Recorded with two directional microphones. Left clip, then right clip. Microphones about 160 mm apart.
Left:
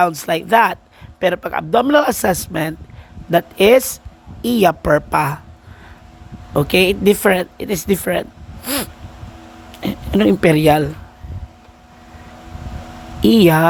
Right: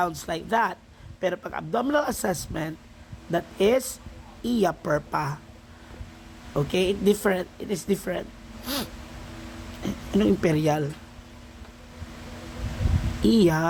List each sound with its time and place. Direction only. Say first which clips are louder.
0.0 s speech: left 11 dB; 45° left (ahead or behind)
6.5 s speech: left 10 dB; 50° left (ahead or behind)
13.2 s speech: left 10 dB; 45° left (ahead or behind)